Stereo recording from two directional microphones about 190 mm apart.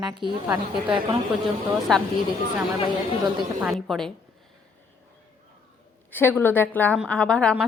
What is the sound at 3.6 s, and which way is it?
Speech, centre (ahead or behind).